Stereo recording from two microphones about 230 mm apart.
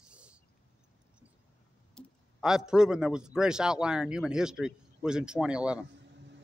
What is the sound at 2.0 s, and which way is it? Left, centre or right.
A man's voice, centre.